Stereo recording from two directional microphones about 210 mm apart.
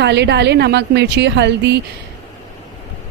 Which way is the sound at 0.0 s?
55° right (ahead or behind).